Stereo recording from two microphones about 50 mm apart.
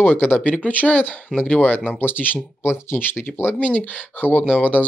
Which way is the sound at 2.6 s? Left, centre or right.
Left.